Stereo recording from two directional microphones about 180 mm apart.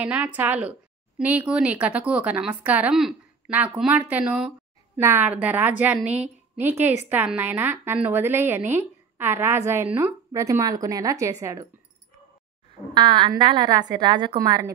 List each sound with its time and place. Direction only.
0.0 s a woman's voice: 10° right (ahead or behind)
12.9 s a woman's voice: 25° right (ahead or behind)